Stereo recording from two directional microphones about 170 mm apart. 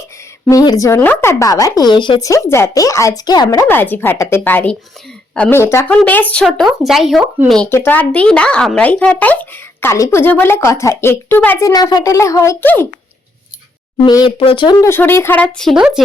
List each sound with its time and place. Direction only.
0.4 s speech: 20° left (ahead or behind)
3.7 s speech: 10° left (ahead or behind)
14.0 s speech: 25° left (ahead or behind); by 15.9 s centre (ahead or behind)